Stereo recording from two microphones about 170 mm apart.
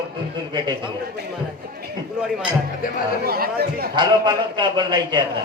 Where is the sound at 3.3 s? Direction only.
65° right (ahead or behind).